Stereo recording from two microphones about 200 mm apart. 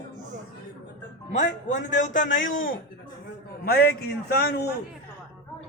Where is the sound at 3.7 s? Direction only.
50° left (ahead or behind).